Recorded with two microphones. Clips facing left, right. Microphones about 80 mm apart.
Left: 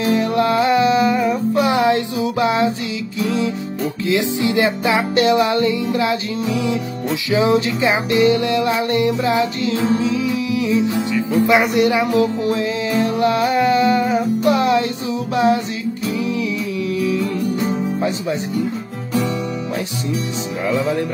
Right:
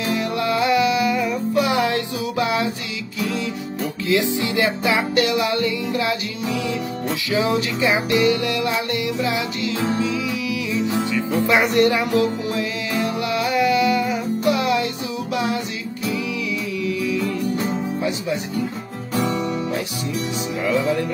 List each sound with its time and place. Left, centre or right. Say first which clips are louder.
0.0 s music: left 6 dB; left
7.2 s music: left 5 dB; left
11.5 s speech: even; centre
12.0 s music: left 3 dB; left
17.6 s music: left 3 dB; left
20.6 s music: left 1 dB; left